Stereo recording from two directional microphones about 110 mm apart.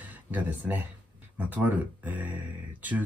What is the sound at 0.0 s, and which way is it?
Speech, 15° right (ahead or behind).